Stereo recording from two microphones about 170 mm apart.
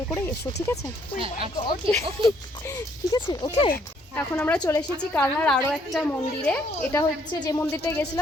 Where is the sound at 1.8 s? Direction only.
30° right (ahead or behind).